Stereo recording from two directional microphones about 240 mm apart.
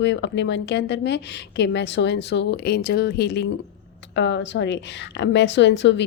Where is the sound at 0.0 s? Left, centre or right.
Left.